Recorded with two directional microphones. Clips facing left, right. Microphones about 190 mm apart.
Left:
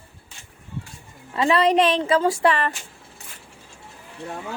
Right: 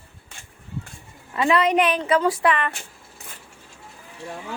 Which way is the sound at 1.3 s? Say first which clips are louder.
Left 1 dB; 30° left (ahead or behind).